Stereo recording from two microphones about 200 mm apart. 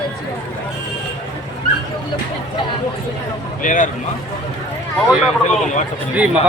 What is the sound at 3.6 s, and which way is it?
Speech, 40° left (ahead or behind).